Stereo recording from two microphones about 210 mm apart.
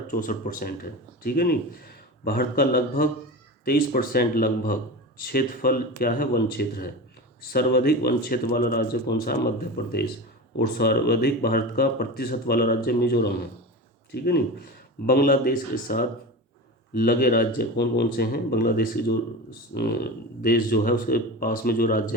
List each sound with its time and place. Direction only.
0.1 s speech: 40° left (ahead or behind)